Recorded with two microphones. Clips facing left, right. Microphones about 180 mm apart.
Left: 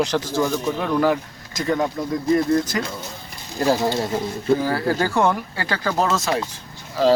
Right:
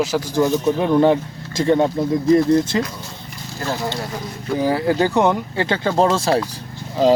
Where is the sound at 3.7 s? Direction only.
20° left (ahead or behind).